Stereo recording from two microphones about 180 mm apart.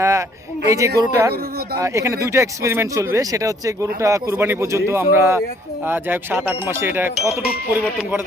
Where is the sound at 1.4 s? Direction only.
60° right (ahead or behind).